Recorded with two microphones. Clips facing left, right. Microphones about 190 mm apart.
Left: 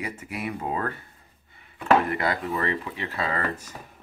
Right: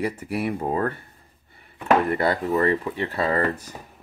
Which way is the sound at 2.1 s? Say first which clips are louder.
Right 5 dB; 30° right (ahead or behind).